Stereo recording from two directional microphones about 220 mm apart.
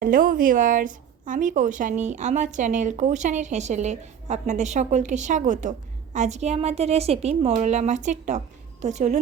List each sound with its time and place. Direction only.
0.0 s a woman's voice: 40° right (ahead or behind)